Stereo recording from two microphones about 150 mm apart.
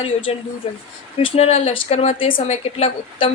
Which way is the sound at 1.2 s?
45° left (ahead or behind).